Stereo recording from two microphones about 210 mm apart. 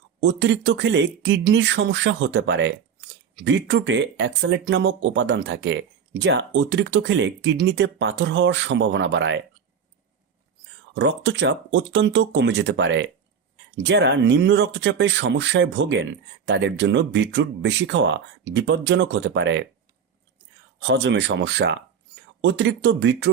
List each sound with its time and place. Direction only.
0.2 s speech: 60° right (ahead or behind)
10.9 s speech: 60° right (ahead or behind)
20.8 s speech: 55° right (ahead or behind)